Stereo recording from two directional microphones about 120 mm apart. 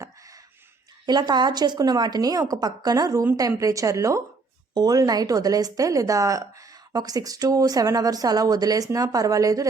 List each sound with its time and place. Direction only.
1.0 s a woman's voice: 35° right (ahead or behind)